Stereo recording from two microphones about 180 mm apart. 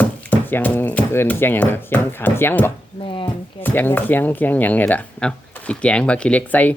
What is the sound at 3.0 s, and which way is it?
Speech, 30° left (ahead or behind).